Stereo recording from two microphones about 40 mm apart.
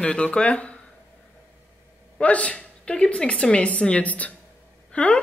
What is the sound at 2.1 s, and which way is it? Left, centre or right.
A woman's voice, left.